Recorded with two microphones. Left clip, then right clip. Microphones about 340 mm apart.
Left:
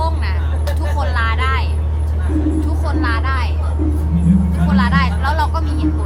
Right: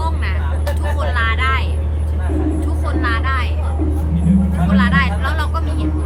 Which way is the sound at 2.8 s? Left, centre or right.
Centre.